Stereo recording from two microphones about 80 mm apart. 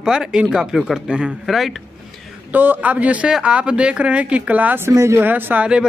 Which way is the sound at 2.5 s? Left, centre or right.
Right.